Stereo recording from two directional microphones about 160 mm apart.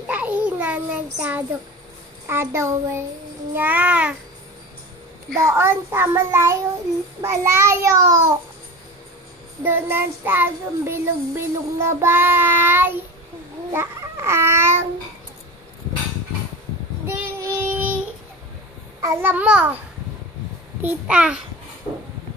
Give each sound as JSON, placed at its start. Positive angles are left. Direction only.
{"t": 0.1, "sound": "child singing", "side_deg": -10}
{"t": 5.4, "sound": "child singing", "side_deg": -15}
{"t": 9.6, "sound": "child singing", "side_deg": -15}
{"t": 13.7, "sound": "babbling", "side_deg": -15}
{"t": 17.0, "sound": "child singing", "side_deg": -15}
{"t": 20.8, "sound": "child singing", "side_deg": -10}